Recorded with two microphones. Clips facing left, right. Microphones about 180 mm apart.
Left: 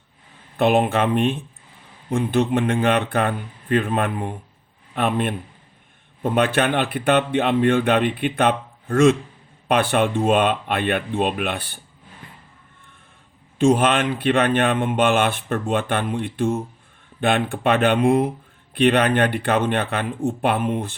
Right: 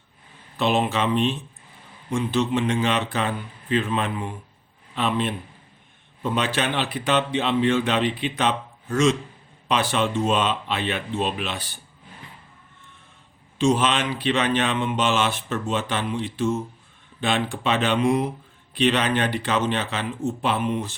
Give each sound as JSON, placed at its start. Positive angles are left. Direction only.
{"t": 0.5, "sound": "speech", "side_deg": 55}
{"t": 13.6, "sound": "speech", "side_deg": 55}